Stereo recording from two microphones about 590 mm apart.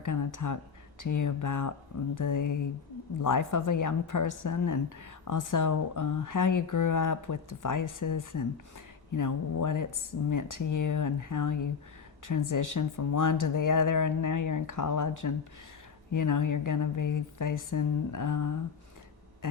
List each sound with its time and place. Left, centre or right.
0.0 s speech: left